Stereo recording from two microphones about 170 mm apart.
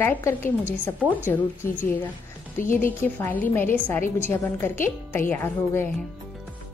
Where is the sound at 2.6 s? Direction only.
50° left (ahead or behind).